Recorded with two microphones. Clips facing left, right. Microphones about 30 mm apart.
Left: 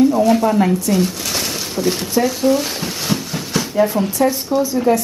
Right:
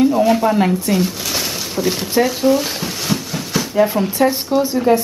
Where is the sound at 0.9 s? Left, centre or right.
Centre.